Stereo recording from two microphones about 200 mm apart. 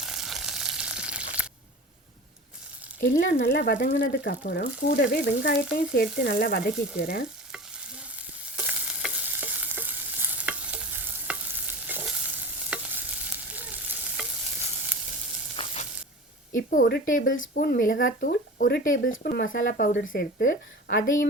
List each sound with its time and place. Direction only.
0.0 s frying: centre (ahead or behind)
3.0 s speech: 50° left (ahead or behind)
8.5 s stir: 5° right (ahead or behind)
15.5 s frying: 30° left (ahead or behind)
16.5 s speech: 45° left (ahead or behind)